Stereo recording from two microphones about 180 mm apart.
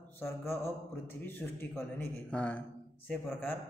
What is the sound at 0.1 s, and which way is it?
A man's voice, 15° left (ahead or behind).